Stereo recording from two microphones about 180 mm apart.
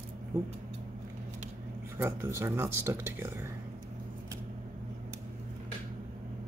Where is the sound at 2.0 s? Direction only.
15° right (ahead or behind).